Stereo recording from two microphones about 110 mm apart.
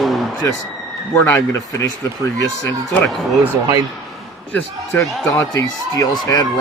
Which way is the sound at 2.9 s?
Centre (ahead or behind).